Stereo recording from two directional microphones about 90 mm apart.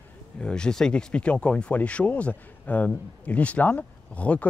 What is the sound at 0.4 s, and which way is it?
Speech, 10° left (ahead or behind).